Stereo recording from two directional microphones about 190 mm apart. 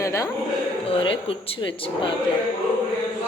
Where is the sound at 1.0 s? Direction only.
30° left (ahead or behind).